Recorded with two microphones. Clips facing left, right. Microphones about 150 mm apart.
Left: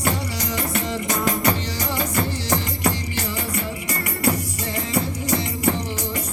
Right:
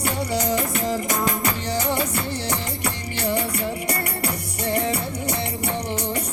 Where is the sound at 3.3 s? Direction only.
65° right (ahead or behind).